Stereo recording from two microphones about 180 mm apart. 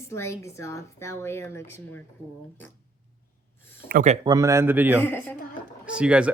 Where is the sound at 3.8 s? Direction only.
45° right (ahead or behind).